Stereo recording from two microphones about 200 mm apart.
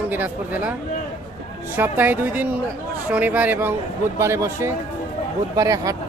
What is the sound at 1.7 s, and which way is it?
Speech, 10° right (ahead or behind).